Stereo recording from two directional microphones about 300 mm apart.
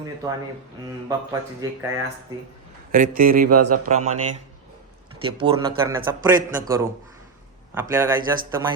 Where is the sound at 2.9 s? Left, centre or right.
Right.